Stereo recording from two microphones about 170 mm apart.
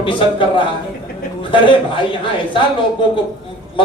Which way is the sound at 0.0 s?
30° left (ahead or behind).